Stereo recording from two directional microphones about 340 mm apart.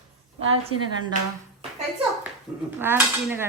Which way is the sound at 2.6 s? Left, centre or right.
Centre.